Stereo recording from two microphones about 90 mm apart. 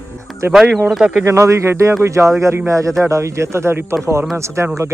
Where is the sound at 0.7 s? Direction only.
Centre (ahead or behind).